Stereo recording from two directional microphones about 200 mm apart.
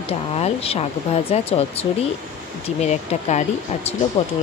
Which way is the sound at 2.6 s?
35° left (ahead or behind).